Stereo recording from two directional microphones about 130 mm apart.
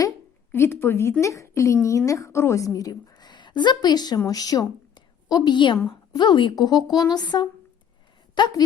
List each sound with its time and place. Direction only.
0.5 s a woman's voice: 20° left (ahead or behind); by 8.5 s 35° left (ahead or behind)